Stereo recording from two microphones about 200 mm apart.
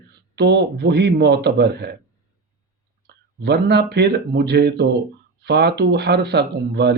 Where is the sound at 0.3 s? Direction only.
55° right (ahead or behind).